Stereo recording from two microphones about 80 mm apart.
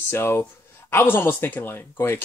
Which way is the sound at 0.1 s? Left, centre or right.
Left.